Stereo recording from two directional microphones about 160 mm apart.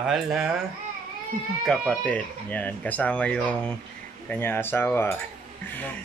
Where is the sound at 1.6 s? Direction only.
5° left (ahead or behind).